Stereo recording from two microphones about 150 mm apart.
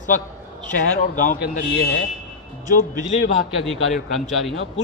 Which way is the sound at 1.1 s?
60° left (ahead or behind).